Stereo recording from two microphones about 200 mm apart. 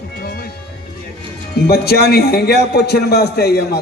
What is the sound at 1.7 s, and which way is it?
A man's voice, 50° left (ahead or behind).